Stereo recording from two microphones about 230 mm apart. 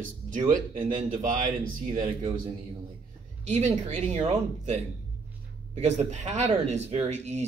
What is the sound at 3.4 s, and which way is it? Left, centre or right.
Speech, right.